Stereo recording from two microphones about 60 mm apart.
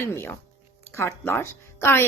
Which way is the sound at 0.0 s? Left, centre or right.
Left.